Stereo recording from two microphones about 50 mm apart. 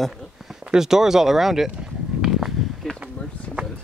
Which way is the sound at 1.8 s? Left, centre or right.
Centre.